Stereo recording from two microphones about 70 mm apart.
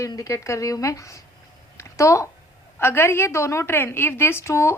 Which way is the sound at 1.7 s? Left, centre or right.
Left.